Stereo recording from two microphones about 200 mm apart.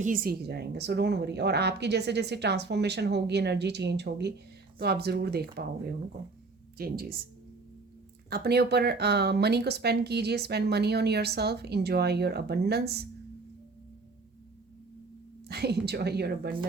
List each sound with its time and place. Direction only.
0.0 s a woman's voice: 45° right (ahead or behind)
6.7 s a woman's voice: 50° right (ahead or behind)
8.3 s speech: 55° right (ahead or behind)
15.4 s a woman's voice: 55° right (ahead or behind)